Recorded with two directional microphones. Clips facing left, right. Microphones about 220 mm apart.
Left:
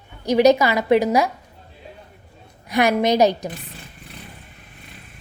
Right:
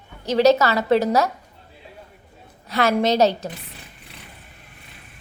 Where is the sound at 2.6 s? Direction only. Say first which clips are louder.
Left 1 dB; 15° left (ahead or behind).